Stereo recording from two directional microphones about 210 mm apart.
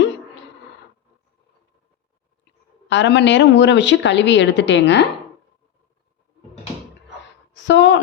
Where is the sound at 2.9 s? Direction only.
60° left (ahead or behind).